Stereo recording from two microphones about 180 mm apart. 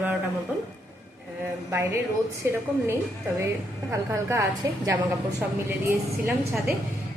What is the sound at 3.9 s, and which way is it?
A woman's voice, 15° right (ahead or behind).